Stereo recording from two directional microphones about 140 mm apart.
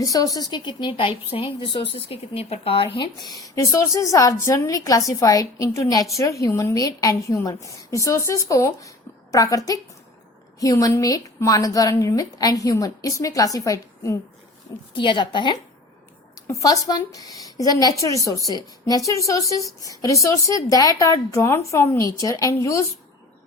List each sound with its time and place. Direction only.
0.0 s a woman's voice: 25° left (ahead or behind)
14.9 s a woman's voice: 35° left (ahead or behind)
16.5 s a woman's voice: 25° left (ahead or behind)